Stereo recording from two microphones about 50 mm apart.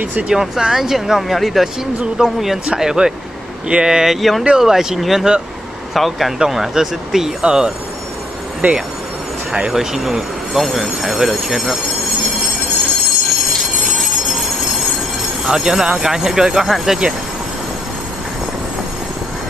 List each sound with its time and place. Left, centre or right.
0.3 s speech: centre
8.6 s speech: right
9.7 s speech: centre
13.6 s train: centre
15.4 s speech: centre